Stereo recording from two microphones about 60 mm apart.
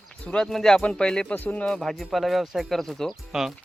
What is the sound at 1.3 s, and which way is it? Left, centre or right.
Speech, left.